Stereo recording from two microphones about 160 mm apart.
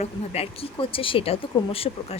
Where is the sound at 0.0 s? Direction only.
40° left (ahead or behind).